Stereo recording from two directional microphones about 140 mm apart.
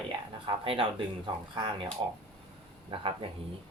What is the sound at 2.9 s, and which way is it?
Speech, 40° right (ahead or behind).